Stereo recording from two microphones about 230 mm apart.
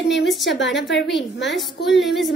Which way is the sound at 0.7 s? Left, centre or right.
Left.